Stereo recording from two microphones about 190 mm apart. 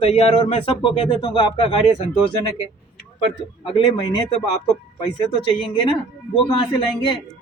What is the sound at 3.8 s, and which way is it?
Speech, 20° left (ahead or behind).